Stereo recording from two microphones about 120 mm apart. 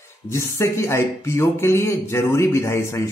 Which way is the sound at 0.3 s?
25° left (ahead or behind).